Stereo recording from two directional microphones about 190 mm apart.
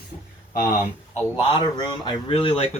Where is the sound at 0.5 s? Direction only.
45° left (ahead or behind).